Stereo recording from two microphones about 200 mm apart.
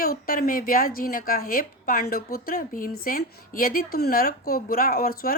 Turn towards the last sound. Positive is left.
turn(degrees=45)  # may be behind; listen again after turning